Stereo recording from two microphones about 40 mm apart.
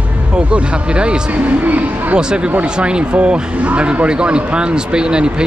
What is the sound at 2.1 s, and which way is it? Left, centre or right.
Speech, right.